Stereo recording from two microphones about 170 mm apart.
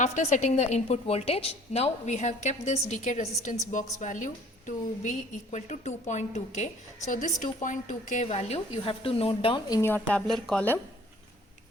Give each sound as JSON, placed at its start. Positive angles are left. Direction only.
{"t": 0.0, "sound": "a woman's voice", "side_deg": 45}